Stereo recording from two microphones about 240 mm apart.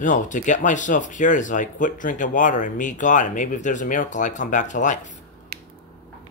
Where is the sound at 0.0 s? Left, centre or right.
Left.